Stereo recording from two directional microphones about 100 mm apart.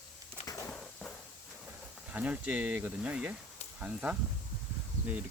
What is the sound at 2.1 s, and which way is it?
Speech, 15° right (ahead or behind).